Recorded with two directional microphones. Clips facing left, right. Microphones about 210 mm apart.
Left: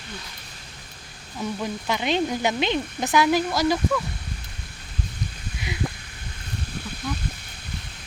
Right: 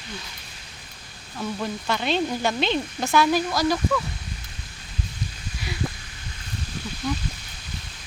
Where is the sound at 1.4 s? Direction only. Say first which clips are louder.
Even; 10° left (ahead or behind).